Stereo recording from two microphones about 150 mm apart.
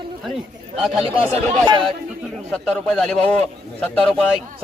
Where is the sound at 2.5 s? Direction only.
5° left (ahead or behind).